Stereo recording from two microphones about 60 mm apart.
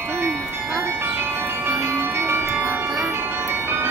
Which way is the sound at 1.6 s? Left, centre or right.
Right.